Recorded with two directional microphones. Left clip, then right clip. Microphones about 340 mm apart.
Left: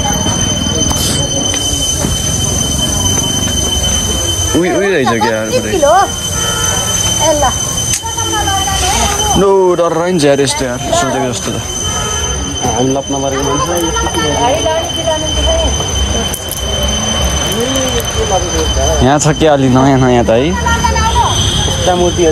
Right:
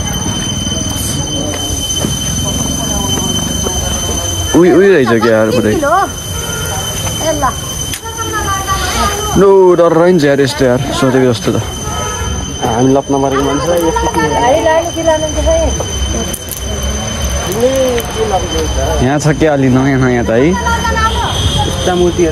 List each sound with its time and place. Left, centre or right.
4.6 s speech: centre
9.4 s speech: centre
19.0 s speech: centre